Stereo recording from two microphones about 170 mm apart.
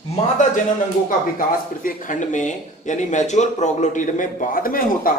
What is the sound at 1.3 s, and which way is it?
Speech, 55° left (ahead or behind).